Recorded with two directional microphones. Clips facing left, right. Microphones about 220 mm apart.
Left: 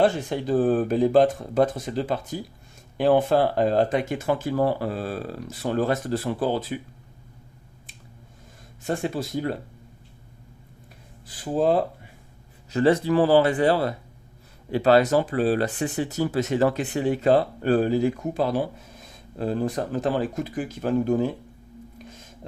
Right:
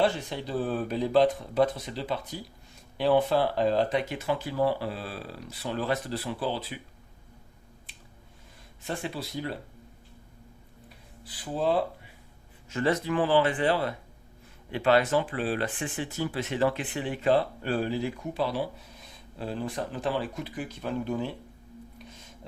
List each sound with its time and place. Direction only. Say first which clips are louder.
0.0 s speech: left 5 dB; 50° left (ahead or behind)
8.8 s speech: left 7 dB; 45° left (ahead or behind)
11.3 s speech: left 6 dB; 45° left (ahead or behind)
12.7 s speech: left 7 dB; 30° left (ahead or behind)